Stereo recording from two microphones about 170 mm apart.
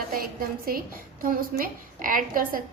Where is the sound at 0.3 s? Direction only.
60° right (ahead or behind).